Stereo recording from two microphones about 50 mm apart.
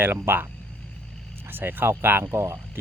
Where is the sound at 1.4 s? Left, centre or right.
Right.